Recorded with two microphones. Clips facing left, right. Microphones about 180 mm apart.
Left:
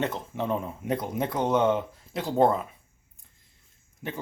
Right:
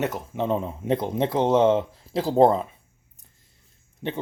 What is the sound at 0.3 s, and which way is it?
Speech, 25° right (ahead or behind).